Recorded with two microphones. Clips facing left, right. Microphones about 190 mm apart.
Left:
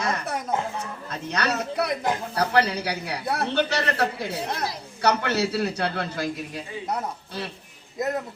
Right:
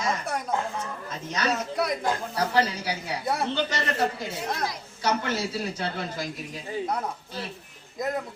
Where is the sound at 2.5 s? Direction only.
70° left (ahead or behind).